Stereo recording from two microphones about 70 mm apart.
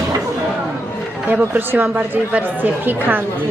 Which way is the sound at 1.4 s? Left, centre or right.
Right.